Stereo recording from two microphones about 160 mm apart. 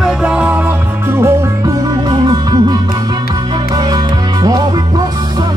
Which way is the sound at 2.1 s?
25° right (ahead or behind).